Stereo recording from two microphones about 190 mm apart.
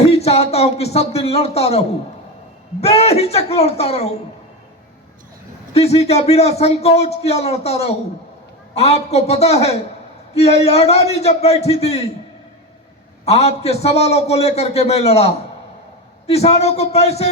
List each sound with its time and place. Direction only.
0.0 s speech: 35° left (ahead or behind)
2.8 s a man's voice: 35° left (ahead or behind)
5.7 s a man's voice: 35° left (ahead or behind)
13.2 s a man's voice: 35° left (ahead or behind)